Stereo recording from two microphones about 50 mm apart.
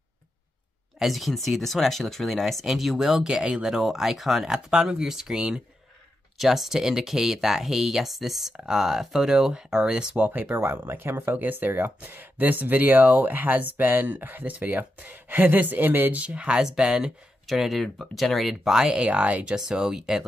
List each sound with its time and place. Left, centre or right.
1.0 s speech: centre
10.2 s speech: right
16.2 s speech: right
16.6 s speech: centre
17.5 s speech: centre
18.9 s speech: right
19.6 s speech: centre